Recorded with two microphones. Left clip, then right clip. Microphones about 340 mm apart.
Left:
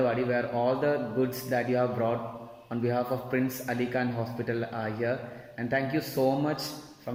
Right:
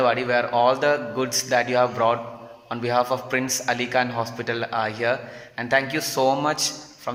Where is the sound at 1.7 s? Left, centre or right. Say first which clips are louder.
Right 7 dB; right.